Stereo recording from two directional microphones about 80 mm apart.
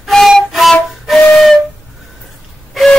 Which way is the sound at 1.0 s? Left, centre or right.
Centre.